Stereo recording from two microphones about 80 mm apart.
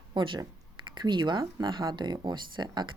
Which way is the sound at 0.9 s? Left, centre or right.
Right.